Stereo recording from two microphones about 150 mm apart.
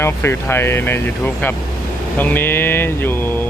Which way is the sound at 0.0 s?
15° left (ahead or behind).